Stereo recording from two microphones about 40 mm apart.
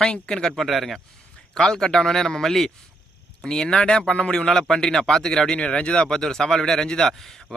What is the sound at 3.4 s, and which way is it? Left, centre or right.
Speech, centre.